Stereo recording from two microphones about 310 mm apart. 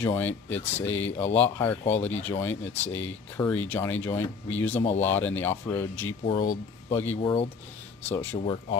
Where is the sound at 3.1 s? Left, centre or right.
Centre.